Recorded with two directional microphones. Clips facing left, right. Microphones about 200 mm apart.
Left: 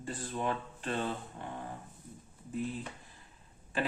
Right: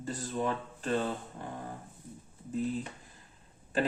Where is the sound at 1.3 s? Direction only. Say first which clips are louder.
Right 1 dB; 40° right (ahead or behind).